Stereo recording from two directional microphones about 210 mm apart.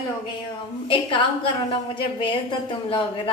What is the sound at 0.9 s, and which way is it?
A woman's voice, 25° left (ahead or behind).